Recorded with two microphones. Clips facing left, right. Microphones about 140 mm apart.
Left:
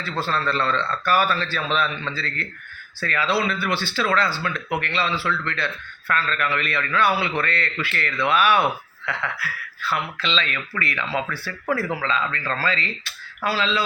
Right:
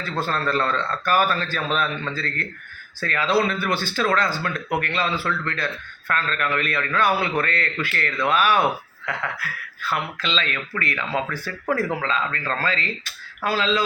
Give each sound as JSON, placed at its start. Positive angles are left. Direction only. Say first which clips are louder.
{"t": 0.0, "sound": "a man's voice", "louder": "even", "side_deg": -45}